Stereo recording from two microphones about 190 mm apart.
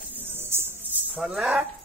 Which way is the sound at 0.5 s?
15° right (ahead or behind).